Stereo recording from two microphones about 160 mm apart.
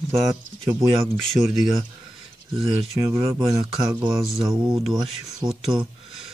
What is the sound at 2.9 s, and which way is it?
Speech, 15° right (ahead or behind).